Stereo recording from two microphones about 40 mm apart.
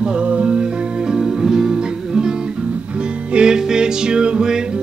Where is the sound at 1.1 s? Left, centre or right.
Centre.